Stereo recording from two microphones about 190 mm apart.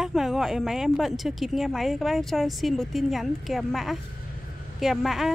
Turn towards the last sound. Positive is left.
turn(degrees=0)  # may be behind; listen again after turning